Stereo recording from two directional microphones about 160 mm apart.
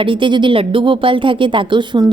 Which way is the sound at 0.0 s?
30° right (ahead or behind).